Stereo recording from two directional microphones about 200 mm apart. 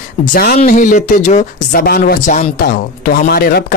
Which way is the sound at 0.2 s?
45° left (ahead or behind).